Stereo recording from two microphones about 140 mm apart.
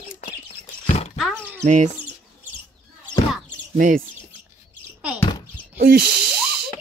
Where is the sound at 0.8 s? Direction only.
55° left (ahead or behind).